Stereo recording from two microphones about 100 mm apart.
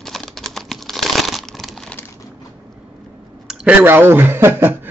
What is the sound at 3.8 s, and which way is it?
Speech, 20° right (ahead or behind).